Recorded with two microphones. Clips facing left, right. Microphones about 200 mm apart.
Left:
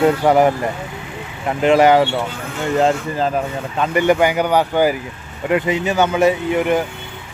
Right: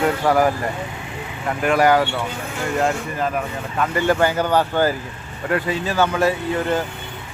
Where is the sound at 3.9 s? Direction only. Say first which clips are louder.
Left 4 dB; 15° left (ahead or behind).